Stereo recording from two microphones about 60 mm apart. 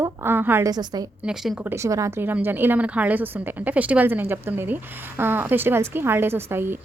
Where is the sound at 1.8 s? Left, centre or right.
Right.